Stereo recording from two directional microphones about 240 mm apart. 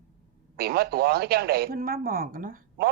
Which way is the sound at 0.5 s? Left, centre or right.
Right.